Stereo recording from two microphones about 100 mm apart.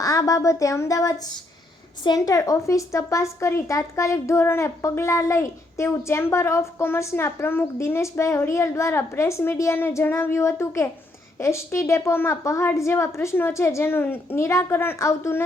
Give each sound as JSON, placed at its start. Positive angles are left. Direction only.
{"t": 0.0, "sound": "a woman's voice", "side_deg": 35}